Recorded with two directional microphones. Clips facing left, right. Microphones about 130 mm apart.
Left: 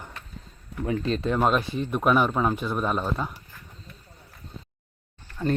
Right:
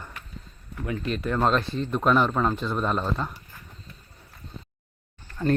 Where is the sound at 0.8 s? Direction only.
30° left (ahead or behind).